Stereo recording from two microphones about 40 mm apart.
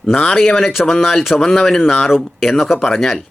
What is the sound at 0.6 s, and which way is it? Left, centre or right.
Speech, centre.